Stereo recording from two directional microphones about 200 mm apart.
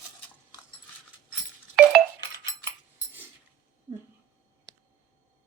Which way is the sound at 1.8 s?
Centre (ahead or behind).